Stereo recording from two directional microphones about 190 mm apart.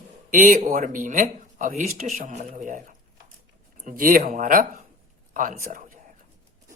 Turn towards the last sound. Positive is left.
turn(degrees=-45)  # may be behind; listen again after turning